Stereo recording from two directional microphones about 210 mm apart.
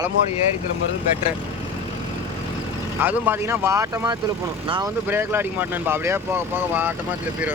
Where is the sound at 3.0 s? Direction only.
10° right (ahead or behind).